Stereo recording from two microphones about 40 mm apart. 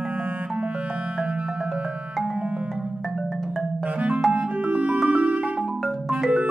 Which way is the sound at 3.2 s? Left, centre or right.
Centre.